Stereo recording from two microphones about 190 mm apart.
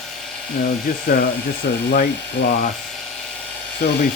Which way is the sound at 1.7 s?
60° left (ahead or behind).